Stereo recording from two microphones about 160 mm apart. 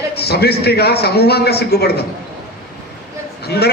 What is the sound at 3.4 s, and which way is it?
Speech, 90° left.